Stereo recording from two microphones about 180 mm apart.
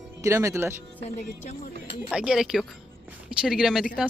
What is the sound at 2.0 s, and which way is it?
Speech, 5° right (ahead or behind).